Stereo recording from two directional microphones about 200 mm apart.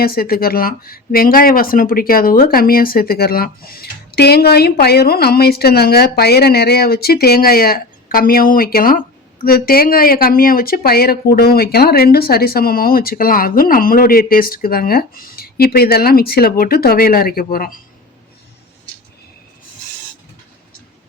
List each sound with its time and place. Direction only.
0.0 s speech: 50° left (ahead or behind)